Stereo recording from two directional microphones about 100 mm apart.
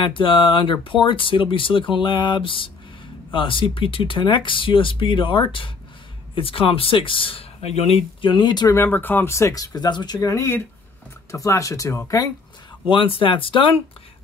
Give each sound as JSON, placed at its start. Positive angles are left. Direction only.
{"t": 0.0, "sound": "speech", "side_deg": 55}
{"t": 2.0, "sound": "a sound", "side_deg": 50}
{"t": 3.3, "sound": "speech", "side_deg": 60}
{"t": 8.6, "sound": "speech", "side_deg": 25}
{"t": 12.9, "sound": "speech", "side_deg": 60}